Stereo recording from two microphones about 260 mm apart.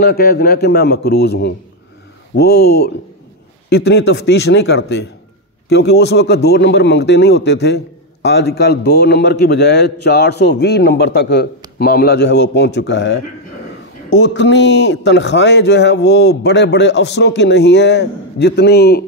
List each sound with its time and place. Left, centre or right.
0.0 s a man's voice: left